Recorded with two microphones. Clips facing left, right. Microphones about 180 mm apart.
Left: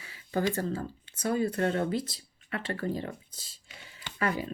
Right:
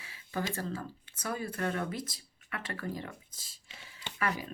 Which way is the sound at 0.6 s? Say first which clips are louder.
Left 5 dB; 30° left (ahead or behind).